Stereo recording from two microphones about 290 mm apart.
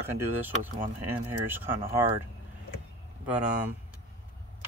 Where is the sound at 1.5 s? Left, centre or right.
Centre.